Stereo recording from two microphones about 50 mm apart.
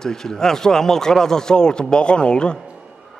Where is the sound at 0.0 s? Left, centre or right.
Centre.